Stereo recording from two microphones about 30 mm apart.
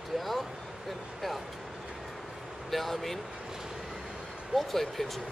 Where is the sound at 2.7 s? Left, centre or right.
Centre.